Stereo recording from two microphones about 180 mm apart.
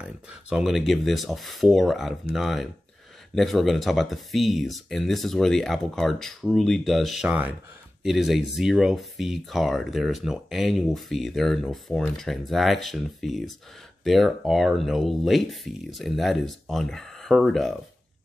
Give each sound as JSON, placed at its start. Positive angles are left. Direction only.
{"t": 0.0, "sound": "speech", "side_deg": -5}